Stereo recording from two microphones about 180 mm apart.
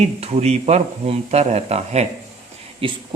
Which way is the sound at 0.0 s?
35° right (ahead or behind).